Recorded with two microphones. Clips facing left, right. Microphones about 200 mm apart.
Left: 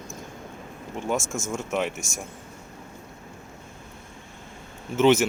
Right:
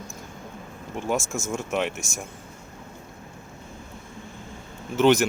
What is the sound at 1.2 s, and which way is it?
Speech, 20° left (ahead or behind).